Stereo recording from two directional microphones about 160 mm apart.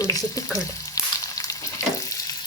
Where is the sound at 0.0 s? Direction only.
20° left (ahead or behind).